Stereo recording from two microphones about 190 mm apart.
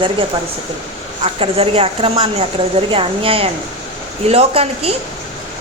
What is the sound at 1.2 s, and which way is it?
A woman's voice, 30° right (ahead or behind).